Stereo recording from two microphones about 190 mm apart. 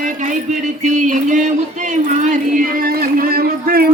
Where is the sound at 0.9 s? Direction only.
40° right (ahead or behind).